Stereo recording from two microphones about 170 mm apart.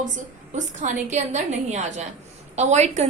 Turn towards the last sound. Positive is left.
turn(degrees=-40)  # may be behind; listen again after turning